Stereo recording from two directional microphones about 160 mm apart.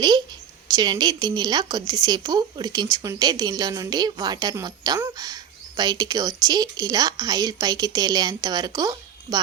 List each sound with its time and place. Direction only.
0.7 s speech: 25° right (ahead or behind)